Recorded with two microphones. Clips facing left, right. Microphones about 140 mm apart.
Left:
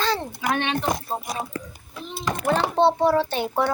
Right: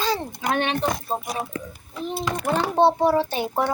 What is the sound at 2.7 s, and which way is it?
Speech, 15° right (ahead or behind).